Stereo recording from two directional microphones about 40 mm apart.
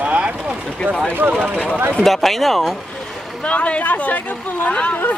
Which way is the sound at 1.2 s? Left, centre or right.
Right.